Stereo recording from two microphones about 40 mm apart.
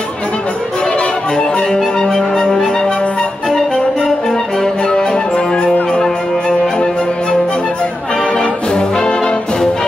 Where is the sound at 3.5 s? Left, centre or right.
Centre.